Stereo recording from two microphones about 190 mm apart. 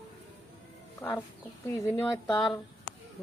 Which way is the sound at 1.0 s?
10° left (ahead or behind).